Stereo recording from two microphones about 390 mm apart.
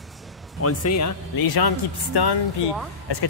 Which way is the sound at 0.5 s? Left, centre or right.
Left.